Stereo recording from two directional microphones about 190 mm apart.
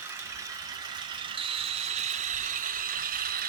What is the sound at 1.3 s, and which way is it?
Ratchet, 30° right (ahead or behind).